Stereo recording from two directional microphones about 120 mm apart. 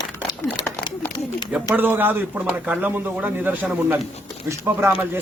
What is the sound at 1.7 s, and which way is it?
Speech, 15° right (ahead or behind).